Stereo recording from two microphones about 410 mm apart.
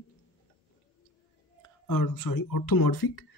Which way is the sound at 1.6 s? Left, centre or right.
Left.